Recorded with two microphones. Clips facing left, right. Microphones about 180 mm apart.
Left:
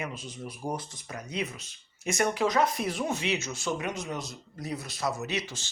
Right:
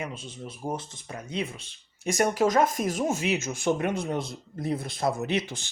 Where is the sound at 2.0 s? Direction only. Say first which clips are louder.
Right 3 dB; 40° right (ahead or behind).